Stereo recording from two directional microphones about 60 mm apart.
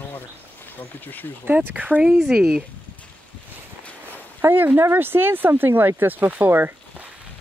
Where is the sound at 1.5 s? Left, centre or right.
Right.